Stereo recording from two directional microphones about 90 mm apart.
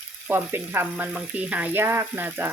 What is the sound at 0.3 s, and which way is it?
Speech, 25° right (ahead or behind).